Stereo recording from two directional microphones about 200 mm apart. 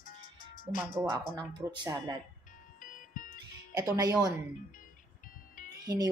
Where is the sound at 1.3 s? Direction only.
20° right (ahead or behind).